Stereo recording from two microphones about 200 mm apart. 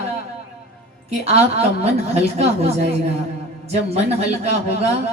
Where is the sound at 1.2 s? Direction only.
30° right (ahead or behind).